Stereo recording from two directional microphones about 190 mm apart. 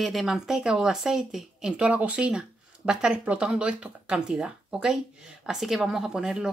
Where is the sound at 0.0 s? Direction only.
Centre (ahead or behind).